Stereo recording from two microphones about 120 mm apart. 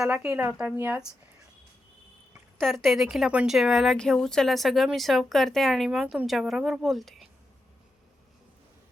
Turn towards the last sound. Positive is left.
turn(degrees=0)  # may be behind; listen again after turning